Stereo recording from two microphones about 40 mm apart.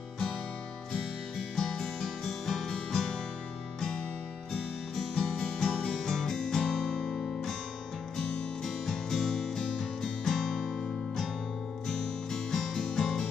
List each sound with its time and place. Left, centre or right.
1.4 s music: centre
4.9 s music: centre
8.6 s music: centre